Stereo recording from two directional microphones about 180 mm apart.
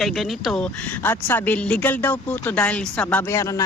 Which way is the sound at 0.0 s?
Centre (ahead or behind).